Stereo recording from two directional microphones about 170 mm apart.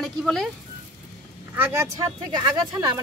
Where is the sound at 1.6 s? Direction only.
15° right (ahead or behind).